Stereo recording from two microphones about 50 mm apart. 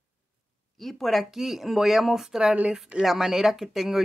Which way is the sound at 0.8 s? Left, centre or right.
Centre.